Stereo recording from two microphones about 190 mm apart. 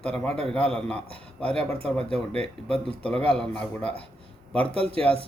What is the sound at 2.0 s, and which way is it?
Speech, 30° right (ahead or behind).